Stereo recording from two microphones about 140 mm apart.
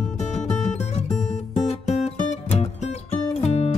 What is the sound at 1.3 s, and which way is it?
Music, 55° left (ahead or behind).